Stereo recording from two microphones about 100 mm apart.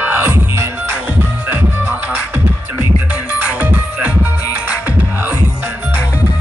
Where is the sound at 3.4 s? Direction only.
15° right (ahead or behind).